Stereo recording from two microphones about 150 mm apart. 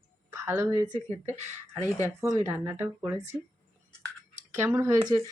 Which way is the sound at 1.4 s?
50° right (ahead or behind).